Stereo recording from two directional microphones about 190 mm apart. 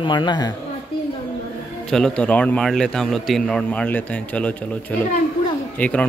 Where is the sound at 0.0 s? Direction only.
25° left (ahead or behind).